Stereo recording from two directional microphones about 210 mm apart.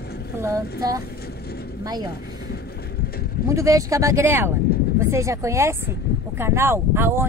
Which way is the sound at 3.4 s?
15° right (ahead or behind).